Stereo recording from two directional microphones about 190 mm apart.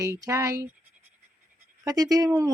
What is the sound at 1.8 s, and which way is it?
Speech, 20° right (ahead or behind).